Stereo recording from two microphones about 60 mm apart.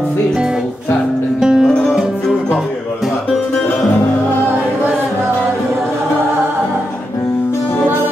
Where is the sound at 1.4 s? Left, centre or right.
Centre.